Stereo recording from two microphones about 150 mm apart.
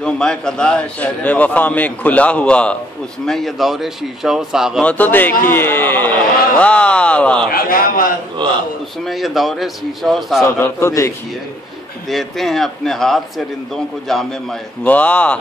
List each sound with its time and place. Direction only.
0.0 s a man's voice: 5° left (ahead or behind)
4.8 s a man's voice: 10° left (ahead or behind)
7.5 s a man's voice: 75° left (ahead or behind)
8.4 s a man's voice: 30° right (ahead or behind)
9.0 s speech: centre (ahead or behind)
10.6 s a man's voice: 20° left (ahead or behind)
12.1 s a man's voice: centre (ahead or behind)